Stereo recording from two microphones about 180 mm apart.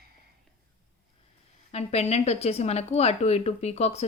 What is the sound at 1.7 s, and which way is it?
Speech, 35° left (ahead or behind).